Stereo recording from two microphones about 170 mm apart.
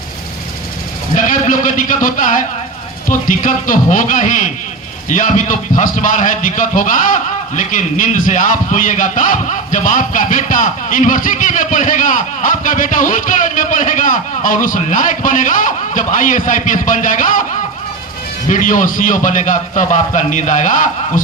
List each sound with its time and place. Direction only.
1.1 s a man's voice: 50° left (ahead or behind)
18.4 s a man's voice: 50° left (ahead or behind)